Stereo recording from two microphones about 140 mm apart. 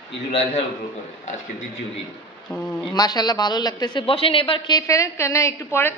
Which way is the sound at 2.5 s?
10° left (ahead or behind).